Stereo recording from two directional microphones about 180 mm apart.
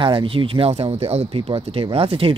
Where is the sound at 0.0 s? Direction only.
30° right (ahead or behind).